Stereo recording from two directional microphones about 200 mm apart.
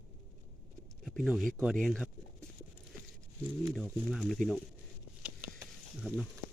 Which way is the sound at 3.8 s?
Centre (ahead or behind).